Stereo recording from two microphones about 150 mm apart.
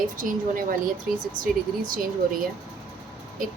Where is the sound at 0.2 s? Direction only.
65° right (ahead or behind).